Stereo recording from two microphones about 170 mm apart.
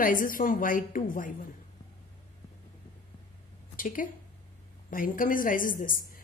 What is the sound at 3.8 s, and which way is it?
A woman's voice, 55° left (ahead or behind).